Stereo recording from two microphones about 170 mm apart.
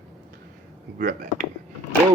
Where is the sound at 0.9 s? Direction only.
50° right (ahead or behind).